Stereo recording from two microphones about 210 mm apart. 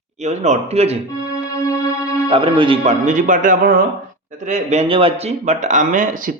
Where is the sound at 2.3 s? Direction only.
25° right (ahead or behind).